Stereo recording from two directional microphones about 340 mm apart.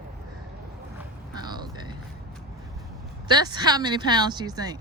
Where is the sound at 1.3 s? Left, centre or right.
Centre.